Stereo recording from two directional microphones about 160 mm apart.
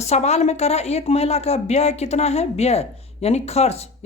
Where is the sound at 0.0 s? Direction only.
45° left (ahead or behind).